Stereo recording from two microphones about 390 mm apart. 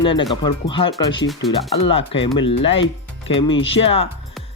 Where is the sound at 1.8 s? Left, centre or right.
Centre.